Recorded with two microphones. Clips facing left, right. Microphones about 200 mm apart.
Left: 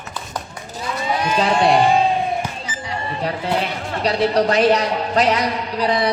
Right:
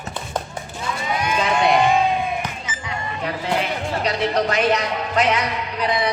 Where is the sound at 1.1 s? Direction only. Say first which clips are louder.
Left 3 dB; 35° left (ahead or behind).